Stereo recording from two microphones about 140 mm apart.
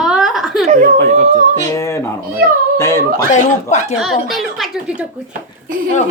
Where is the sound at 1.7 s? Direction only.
20° left (ahead or behind).